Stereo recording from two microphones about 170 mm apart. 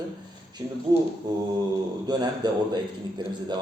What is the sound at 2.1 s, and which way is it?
Speech, 25° right (ahead or behind).